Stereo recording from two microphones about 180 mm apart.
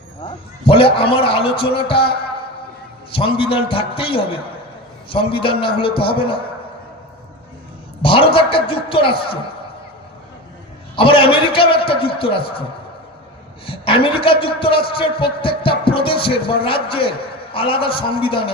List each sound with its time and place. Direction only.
0.2 s a man's voice: 30° left (ahead or behind)
3.1 s a man's voice: 30° left (ahead or behind)
8.0 s a man's voice: 30° left (ahead or behind)
10.9 s a man's voice: 30° left (ahead or behind)
13.7 s a man's voice: 30° left (ahead or behind)